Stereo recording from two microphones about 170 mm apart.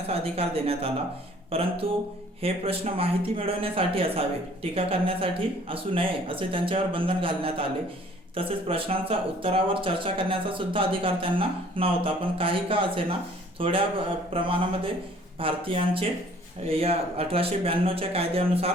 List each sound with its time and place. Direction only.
0.1 s speech: 35° right (ahead or behind)